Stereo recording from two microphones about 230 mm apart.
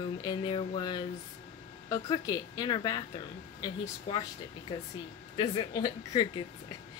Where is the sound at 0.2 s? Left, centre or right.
Left.